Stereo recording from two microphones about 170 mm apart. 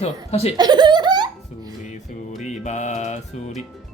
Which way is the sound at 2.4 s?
45° left (ahead or behind).